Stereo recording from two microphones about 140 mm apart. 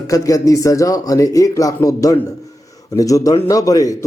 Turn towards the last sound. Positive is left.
turn(degrees=25)  # may be behind; listen again after turning